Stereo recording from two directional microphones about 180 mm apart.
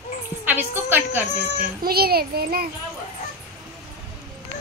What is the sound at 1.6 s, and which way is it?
A child's voice, 60° right (ahead or behind).